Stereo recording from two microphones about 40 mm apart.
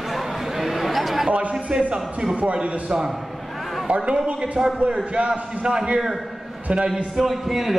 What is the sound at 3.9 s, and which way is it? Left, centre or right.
Speech, right.